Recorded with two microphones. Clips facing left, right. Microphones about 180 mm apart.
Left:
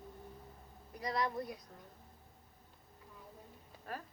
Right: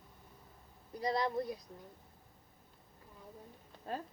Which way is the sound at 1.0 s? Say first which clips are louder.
Right 3 dB; 30° right (ahead or behind).